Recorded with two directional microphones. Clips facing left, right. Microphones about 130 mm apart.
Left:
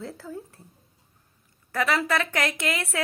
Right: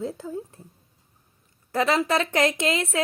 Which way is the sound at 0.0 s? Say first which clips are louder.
Right 5 dB; 20° right (ahead or behind).